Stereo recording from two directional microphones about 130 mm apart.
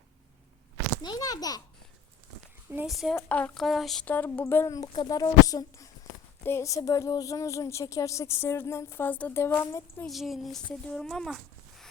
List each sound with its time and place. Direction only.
1.0 s a child's voice: 30° left (ahead or behind)
2.8 s a sound: centre (ahead or behind)
3.2 s speech: 10° left (ahead or behind)
3.6 s a sound: centre (ahead or behind)
4.0 s a woman's voice: 15° left (ahead or behind)
10.1 s speech: centre (ahead or behind)